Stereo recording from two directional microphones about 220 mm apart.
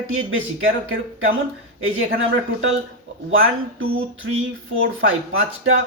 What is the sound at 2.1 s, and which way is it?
Speech, 60° right (ahead or behind).